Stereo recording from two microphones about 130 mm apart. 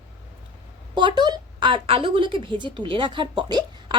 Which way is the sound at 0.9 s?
35° right (ahead or behind).